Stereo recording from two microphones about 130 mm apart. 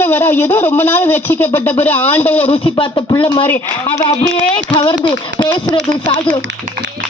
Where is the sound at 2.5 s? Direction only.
45° left (ahead or behind).